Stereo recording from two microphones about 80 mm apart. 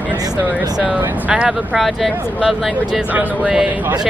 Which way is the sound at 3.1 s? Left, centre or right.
Centre.